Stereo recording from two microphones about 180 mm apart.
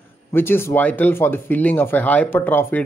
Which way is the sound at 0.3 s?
10° left (ahead or behind).